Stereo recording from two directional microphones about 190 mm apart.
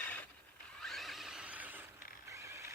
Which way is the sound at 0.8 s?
Centre (ahead or behind).